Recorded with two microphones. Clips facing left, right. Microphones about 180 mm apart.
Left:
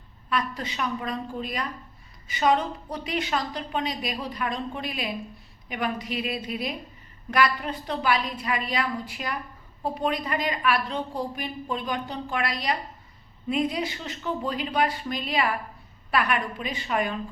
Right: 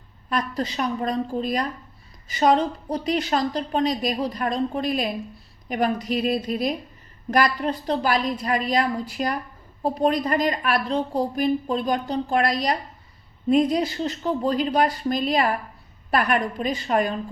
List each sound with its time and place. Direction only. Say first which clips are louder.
0.3 s a woman's voice: right 3 dB; 40° right (ahead or behind)